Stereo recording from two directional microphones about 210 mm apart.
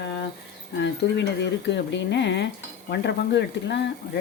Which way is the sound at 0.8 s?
55° left (ahead or behind).